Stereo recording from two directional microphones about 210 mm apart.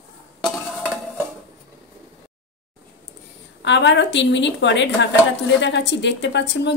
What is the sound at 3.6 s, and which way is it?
A woman's voice, 55° left (ahead or behind).